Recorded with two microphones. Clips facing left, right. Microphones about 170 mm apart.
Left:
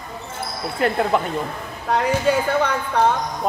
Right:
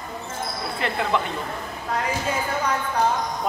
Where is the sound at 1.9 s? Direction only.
70° left (ahead or behind).